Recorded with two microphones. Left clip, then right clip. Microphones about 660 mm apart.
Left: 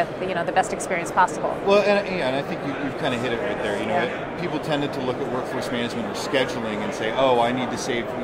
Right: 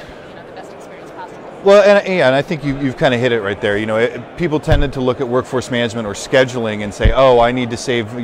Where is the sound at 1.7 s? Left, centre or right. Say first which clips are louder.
Right 11 dB; right.